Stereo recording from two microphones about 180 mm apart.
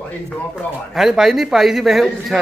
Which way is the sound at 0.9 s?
Centre (ahead or behind).